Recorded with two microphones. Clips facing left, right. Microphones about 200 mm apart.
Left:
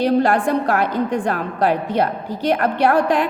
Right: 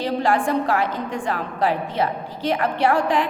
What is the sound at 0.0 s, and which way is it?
A woman's voice, 60° left (ahead or behind).